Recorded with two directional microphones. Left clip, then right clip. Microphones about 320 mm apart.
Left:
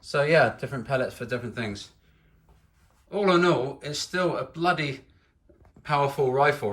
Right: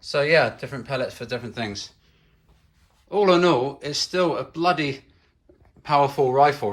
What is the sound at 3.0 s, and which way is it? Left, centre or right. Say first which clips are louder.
Speech: right 4 dB; centre.